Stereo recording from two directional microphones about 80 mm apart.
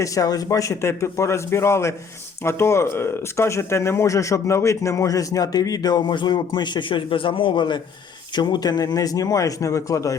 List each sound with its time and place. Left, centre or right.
0.0 s speech: left
8.4 s speech: left